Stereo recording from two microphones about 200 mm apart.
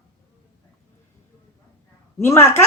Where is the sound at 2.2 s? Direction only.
15° left (ahead or behind).